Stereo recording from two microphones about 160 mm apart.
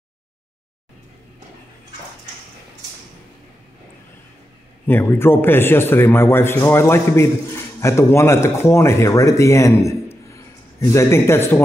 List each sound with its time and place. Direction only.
4.8 s a man's voice: 15° left (ahead or behind)